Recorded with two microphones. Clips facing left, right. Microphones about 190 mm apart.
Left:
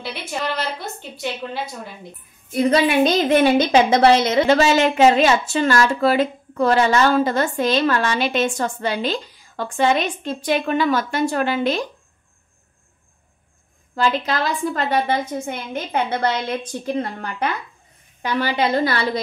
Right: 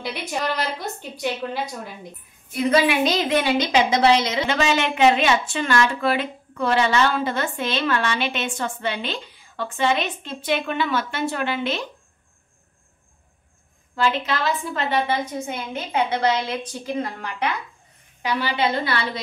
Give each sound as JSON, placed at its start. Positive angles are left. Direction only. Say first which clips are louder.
{"t": 0.3, "sound": "a woman's voice", "louder": "left 1 dB", "side_deg": -15}
{"t": 2.5, "sound": "a woman's voice", "louder": "left 2 dB", "side_deg": 35}
{"t": 3.1, "sound": "a woman's voice", "louder": "left 5 dB", "side_deg": 50}
{"t": 4.5, "sound": "a woman's voice", "louder": "left 6 dB", "side_deg": 40}
{"t": 13.9, "sound": "a woman's voice", "louder": "left 2 dB", "side_deg": 40}
{"t": 15.9, "sound": "a woman's voice", "louder": "even", "side_deg": 55}